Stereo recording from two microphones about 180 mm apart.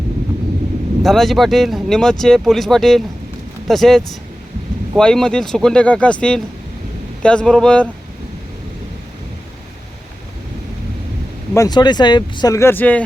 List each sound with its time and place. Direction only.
1.0 s speech: centre (ahead or behind)
11.5 s speech: 20° left (ahead or behind)